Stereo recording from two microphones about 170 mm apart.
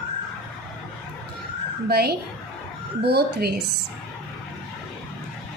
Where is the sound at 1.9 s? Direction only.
65° right (ahead or behind).